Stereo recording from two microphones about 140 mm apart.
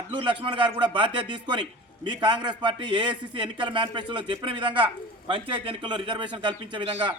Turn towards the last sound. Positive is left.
turn(degrees=-35)  # may be behind; listen again after turning